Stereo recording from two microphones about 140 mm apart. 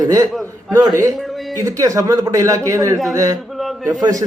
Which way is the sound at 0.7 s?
25° right (ahead or behind).